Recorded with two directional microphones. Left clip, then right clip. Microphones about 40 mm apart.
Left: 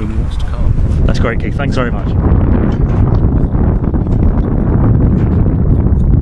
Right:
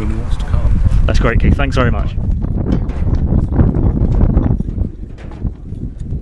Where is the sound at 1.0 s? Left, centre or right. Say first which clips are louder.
Even; right.